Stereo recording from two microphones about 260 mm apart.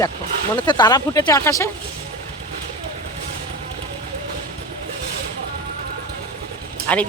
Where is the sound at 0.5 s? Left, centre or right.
Centre.